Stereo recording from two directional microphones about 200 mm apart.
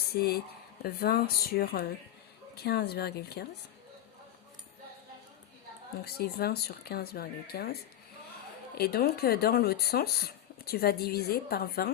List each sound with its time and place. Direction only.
0.1 s speech: 50° left (ahead or behind)
6.1 s speech: 50° left (ahead or behind)
8.8 s speech: 50° left (ahead or behind)